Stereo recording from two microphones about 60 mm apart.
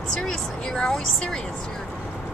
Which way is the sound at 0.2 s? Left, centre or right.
Centre.